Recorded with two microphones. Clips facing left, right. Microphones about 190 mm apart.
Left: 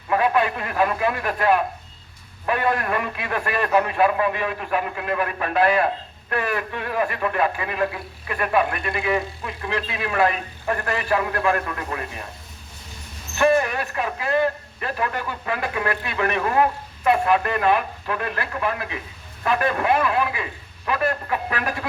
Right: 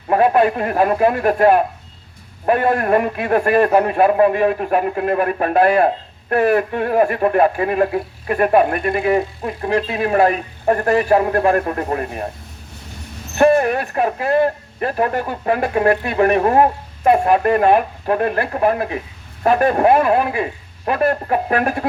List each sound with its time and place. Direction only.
0.1 s speech: 45° right (ahead or behind)
13.3 s speech: 50° right (ahead or behind)